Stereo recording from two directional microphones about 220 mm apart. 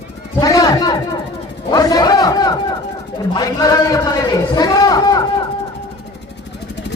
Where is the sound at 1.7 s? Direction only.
15° left (ahead or behind).